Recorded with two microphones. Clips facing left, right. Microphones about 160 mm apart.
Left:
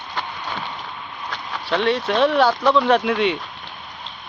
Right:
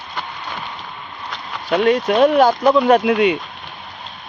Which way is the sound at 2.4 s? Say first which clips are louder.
Right 3 dB; 45° right (ahead or behind).